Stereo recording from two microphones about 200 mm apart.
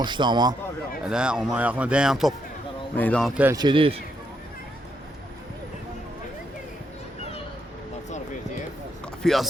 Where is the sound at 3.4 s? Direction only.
15° right (ahead or behind).